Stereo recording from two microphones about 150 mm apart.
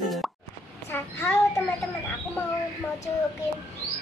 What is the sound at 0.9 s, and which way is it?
Child singing, 15° left (ahead or behind).